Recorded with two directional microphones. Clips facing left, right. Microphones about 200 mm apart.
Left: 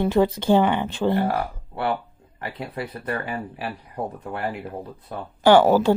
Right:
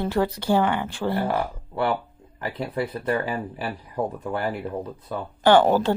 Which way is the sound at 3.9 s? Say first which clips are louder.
Right 6 dB; 35° right (ahead or behind).